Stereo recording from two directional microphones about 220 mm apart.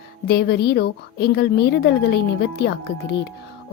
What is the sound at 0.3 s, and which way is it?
A woman's voice, 45° left (ahead or behind).